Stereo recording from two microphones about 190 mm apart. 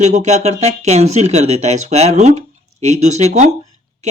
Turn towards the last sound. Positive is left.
turn(degrees=-35)  # may be behind; listen again after turning